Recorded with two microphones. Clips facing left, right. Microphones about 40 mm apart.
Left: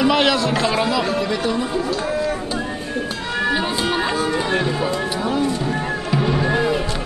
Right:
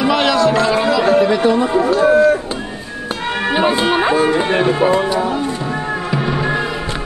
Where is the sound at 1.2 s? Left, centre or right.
Right.